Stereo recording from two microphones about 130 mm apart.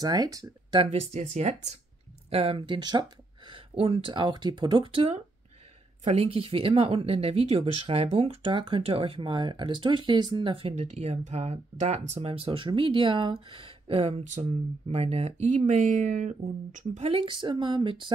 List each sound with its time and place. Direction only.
0.0 s speech: 30° right (ahead or behind)
0.7 s speech: 55° right (ahead or behind)
2.2 s speech: 45° right (ahead or behind)
6.2 s speech: 45° right (ahead or behind)
14.2 s speech: 60° right (ahead or behind); by 18.1 s 40° right (ahead or behind)